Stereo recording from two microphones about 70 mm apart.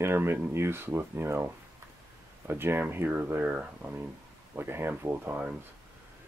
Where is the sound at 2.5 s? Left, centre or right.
Right.